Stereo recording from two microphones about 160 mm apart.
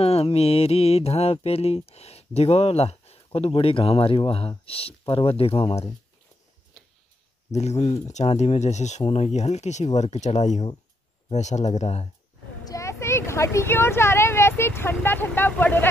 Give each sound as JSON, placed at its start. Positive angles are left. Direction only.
{"t": 0.0, "sound": "mantra", "side_deg": 40}
{"t": 6.8, "sound": "tick-tock", "side_deg": 5}
{"t": 7.5, "sound": "speech", "side_deg": 45}
{"t": 12.6, "sound": "speech", "side_deg": 20}